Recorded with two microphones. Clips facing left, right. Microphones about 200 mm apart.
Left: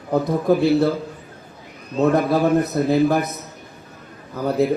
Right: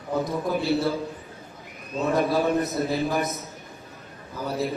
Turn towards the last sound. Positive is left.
turn(degrees=55)  # may be behind; listen again after turning